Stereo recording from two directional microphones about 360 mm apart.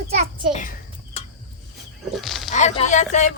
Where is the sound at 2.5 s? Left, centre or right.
Centre.